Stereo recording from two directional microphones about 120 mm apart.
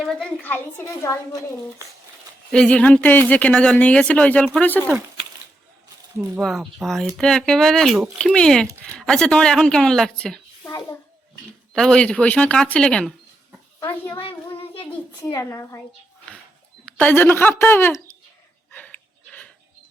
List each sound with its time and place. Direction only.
0.0 s speech: 5° left (ahead or behind); by 1.5 s 25° left (ahead or behind)
2.5 s speech: 10° left (ahead or behind)
6.4 s speech: centre (ahead or behind)
8.6 s speech: 25° right (ahead or behind)
9.0 s speech: 5° left (ahead or behind)
11.7 s speech: 5° left (ahead or behind)
14.1 s child singing: 50° left (ahead or behind)
15.2 s a child's voice: 25° left (ahead or behind)
16.8 s speech: 10° left (ahead or behind)
18.7 s a sound: 10° left (ahead or behind)